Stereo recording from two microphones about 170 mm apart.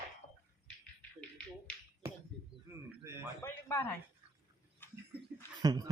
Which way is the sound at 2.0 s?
15° right (ahead or behind).